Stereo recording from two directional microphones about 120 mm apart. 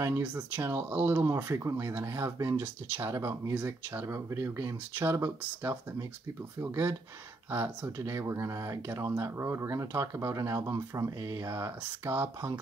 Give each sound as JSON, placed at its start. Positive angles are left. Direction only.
{"t": 0.2, "sound": "speech", "side_deg": -15}